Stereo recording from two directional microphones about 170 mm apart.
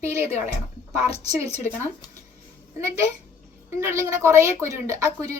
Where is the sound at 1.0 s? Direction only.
35° left (ahead or behind).